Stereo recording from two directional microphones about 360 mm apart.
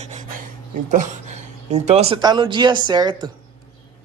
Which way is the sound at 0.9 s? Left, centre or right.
Centre.